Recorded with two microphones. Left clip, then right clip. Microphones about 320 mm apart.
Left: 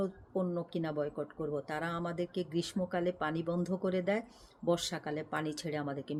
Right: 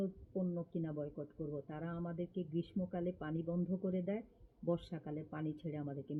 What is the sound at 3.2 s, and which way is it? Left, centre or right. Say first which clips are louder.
Speech: left 7 dB; left.